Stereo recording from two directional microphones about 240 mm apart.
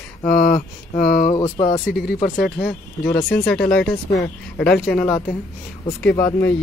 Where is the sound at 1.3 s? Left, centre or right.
Centre.